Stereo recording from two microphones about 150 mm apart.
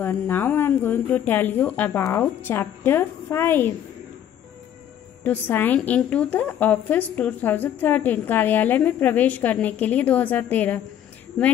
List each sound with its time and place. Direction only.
0.0 s a woman's voice: 15° left (ahead or behind)
5.2 s a woman's voice: 15° left (ahead or behind)